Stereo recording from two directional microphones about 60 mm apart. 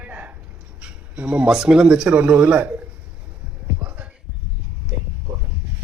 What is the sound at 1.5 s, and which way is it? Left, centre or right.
Speech, centre.